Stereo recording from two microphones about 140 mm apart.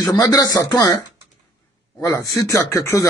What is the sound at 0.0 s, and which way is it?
Speech, 25° left (ahead or behind).